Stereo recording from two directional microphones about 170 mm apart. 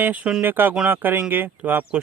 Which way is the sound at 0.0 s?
10° right (ahead or behind).